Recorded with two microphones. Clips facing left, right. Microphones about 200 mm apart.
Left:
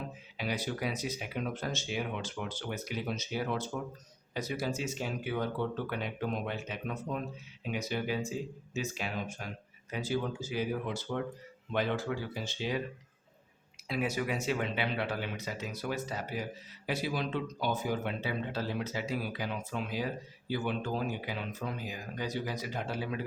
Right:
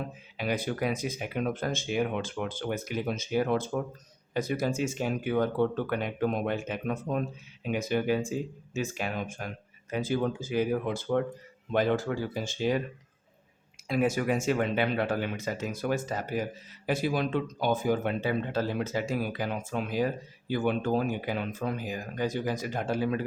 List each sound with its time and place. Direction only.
0.3 s speech: 50° right (ahead or behind)
13.8 s speech: 50° right (ahead or behind)